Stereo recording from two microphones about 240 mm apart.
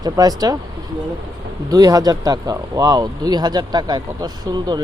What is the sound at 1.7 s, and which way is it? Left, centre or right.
Speech, centre.